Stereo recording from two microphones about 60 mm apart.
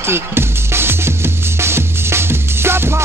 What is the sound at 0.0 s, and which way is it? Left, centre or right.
Music, right.